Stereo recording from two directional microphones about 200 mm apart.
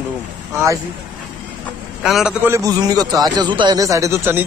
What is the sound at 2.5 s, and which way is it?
A man's voice, 15° right (ahead or behind).